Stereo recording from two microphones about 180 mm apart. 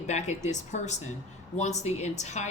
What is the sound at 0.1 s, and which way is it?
Speech, 40° left (ahead or behind).